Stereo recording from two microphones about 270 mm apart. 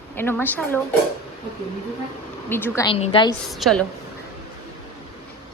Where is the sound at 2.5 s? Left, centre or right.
Centre.